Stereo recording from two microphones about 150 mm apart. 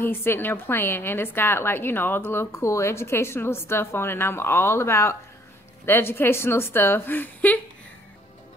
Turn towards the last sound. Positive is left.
turn(degrees=10)  # may be behind; listen again after turning